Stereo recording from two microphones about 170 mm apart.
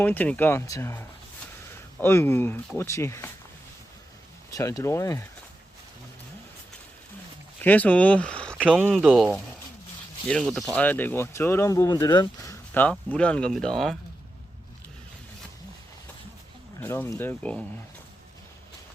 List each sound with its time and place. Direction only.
0.0 s speech: 10° left (ahead or behind)
4.5 s speech: 20° left (ahead or behind)
7.6 s speech: 10° left (ahead or behind)
12.7 s speech: 10° left (ahead or behind)
16.8 s speech: 15° left (ahead or behind)